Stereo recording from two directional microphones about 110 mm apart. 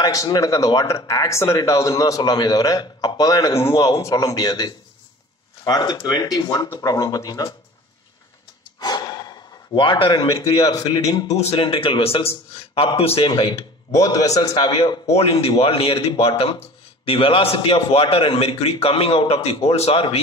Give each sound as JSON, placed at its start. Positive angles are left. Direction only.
{"t": 0.0, "sound": "a man's voice", "side_deg": 35}
{"t": 8.7, "sound": "gasp", "side_deg": 40}
{"t": 10.8, "sound": "speech", "side_deg": 35}
{"t": 11.3, "sound": "a man's voice", "side_deg": 80}
{"t": 11.6, "sound": "a man's voice", "side_deg": 50}
{"t": 13.3, "sound": "speech", "side_deg": 45}
{"t": 13.9, "sound": "speech", "side_deg": 30}
{"t": 14.7, "sound": "a man's voice", "side_deg": 55}